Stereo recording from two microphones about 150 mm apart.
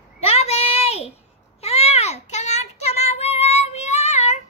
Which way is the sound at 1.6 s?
45° left (ahead or behind).